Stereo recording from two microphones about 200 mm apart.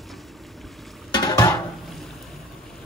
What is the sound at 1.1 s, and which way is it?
Music, 20° left (ahead or behind).